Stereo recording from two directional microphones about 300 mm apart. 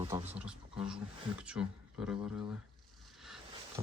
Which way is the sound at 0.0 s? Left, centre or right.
Centre.